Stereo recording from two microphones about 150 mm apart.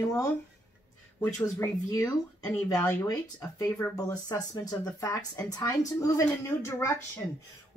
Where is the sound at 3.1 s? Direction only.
20° left (ahead or behind).